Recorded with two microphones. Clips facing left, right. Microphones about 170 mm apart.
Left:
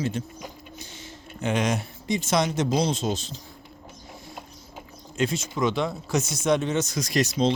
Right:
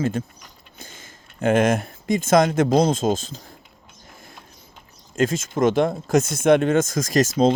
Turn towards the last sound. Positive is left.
turn(degrees=-45)  # may be behind; listen again after turning